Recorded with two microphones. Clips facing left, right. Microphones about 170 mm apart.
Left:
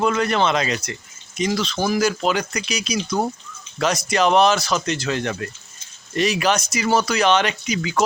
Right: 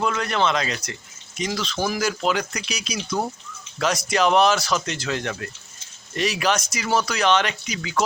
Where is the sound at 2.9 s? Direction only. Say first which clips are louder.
Left 3 dB; 20° left (ahead or behind).